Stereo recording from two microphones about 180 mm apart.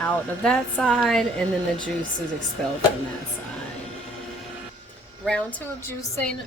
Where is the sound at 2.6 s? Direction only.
5° left (ahead or behind).